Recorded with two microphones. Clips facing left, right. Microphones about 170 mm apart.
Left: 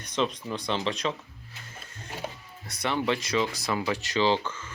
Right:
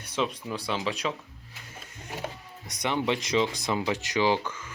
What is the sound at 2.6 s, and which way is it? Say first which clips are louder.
Speech: even; 15° right (ahead or behind).